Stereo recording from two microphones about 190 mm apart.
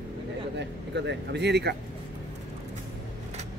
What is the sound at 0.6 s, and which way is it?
Speech, 65° right (ahead or behind).